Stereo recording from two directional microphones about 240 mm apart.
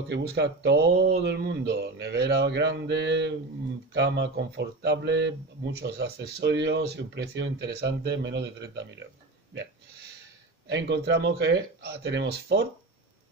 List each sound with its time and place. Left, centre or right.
0.1 s speech: right
10.7 s speech: right